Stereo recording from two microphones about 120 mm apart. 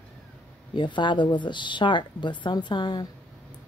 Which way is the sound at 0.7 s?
40° left (ahead or behind).